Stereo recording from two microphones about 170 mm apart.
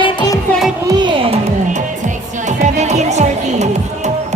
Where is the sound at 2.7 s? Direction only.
40° right (ahead or behind).